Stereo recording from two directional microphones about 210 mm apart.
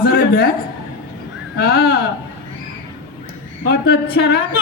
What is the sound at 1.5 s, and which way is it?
Speech, 50° left (ahead or behind).